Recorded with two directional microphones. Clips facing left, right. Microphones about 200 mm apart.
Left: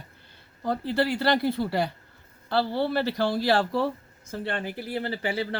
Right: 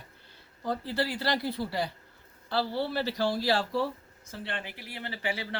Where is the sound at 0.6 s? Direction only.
60° left (ahead or behind).